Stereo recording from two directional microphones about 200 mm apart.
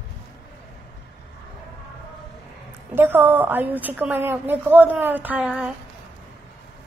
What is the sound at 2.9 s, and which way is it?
A woman's voice, 10° right (ahead or behind).